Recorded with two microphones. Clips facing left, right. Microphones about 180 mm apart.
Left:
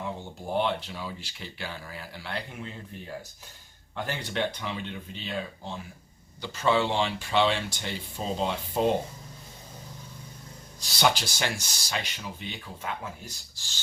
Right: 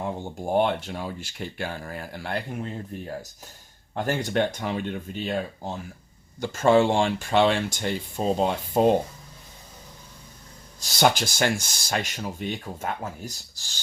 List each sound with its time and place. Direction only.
0.0 s speech: 50° right (ahead or behind)
3.9 s speech: 45° right (ahead or behind)
10.8 s speech: 45° right (ahead or behind)